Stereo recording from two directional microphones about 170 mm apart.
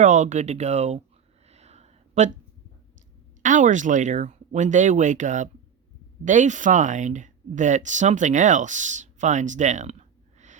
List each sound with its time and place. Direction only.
0.0 s speech: 45° right (ahead or behind)
1.5 s a sound: 40° right (ahead or behind)
3.4 s speech: 45° right (ahead or behind)